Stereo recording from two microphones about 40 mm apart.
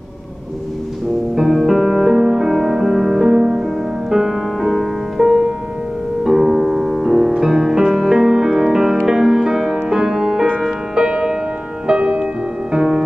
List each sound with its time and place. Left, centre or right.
1.3 s music: centre
11.0 s music: right